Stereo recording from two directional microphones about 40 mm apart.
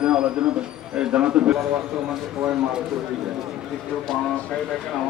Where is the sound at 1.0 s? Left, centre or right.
Right.